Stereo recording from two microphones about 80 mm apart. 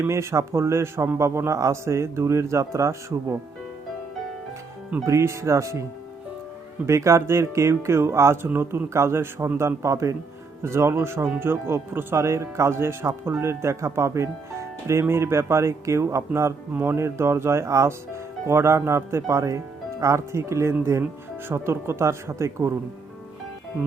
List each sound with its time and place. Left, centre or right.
0.0 s speech: right
5.0 s speech: right
6.8 s speech: right
8.4 s speech: right